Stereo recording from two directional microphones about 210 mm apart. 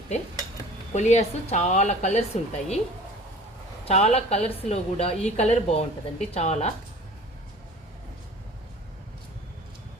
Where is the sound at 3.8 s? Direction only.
30° left (ahead or behind).